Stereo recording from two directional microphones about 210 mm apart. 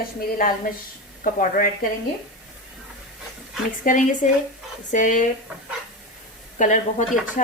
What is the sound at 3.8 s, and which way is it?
Speech, 40° left (ahead or behind).